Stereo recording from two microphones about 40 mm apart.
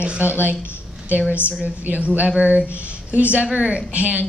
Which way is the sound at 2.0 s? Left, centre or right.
Right.